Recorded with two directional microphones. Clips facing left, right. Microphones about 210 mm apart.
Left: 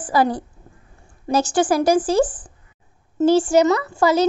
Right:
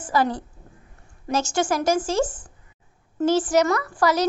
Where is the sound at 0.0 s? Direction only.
35° left (ahead or behind).